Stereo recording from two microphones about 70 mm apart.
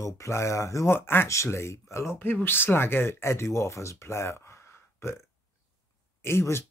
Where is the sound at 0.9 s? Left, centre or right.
Left.